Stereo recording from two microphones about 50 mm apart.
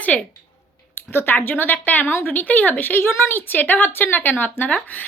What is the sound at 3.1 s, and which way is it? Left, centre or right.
Speech, left.